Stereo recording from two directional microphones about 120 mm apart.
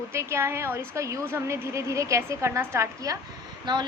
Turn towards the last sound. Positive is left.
turn(degrees=-40)  # may be behind; listen again after turning